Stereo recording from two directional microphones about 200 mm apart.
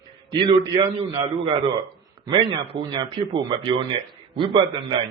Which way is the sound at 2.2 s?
25° right (ahead or behind).